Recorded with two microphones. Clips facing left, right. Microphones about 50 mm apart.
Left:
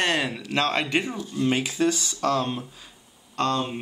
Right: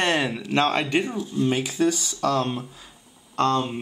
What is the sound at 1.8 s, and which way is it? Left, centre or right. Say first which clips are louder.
Speech: right 2 dB; left.